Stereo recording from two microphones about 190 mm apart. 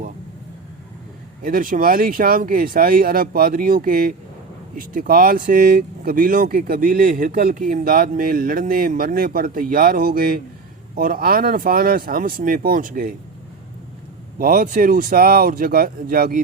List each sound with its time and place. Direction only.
1.4 s speech: 45° right (ahead or behind)
14.3 s speech: 45° right (ahead or behind)